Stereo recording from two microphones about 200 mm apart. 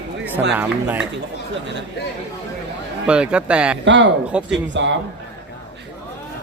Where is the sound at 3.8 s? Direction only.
65° right (ahead or behind).